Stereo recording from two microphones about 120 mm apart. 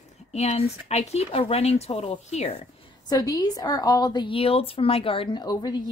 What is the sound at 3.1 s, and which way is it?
A woman's voice, 30° left (ahead or behind).